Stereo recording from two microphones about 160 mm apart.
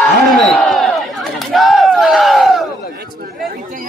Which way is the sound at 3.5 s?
55° right (ahead or behind).